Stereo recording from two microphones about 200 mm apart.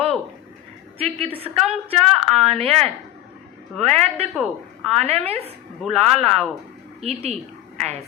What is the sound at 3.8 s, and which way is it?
A woman's voice, 35° right (ahead or behind).